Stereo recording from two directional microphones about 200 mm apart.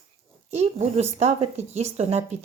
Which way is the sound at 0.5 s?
30° right (ahead or behind).